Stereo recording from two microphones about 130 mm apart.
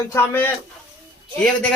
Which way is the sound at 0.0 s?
20° left (ahead or behind).